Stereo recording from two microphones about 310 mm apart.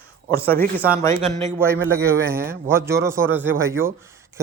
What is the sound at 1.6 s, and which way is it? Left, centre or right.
Speech, centre.